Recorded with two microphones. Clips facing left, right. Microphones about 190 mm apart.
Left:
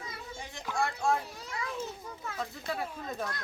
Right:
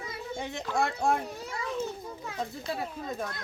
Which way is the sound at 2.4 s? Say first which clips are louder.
Right 2 dB; 25° right (ahead or behind).